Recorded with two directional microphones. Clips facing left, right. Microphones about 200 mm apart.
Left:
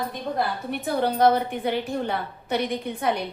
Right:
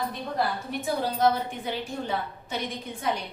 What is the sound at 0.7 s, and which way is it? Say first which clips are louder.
A woman's voice: left 4 dB; 60° left (ahead or behind).